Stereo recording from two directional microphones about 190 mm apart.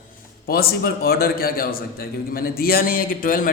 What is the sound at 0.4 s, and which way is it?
A man's voice, 55° left (ahead or behind).